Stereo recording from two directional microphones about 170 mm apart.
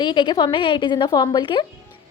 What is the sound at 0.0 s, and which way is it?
A woman's voice, 25° left (ahead or behind).